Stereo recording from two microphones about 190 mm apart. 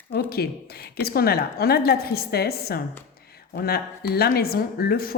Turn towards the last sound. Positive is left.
turn(degrees=55)  # may be behind; listen again after turning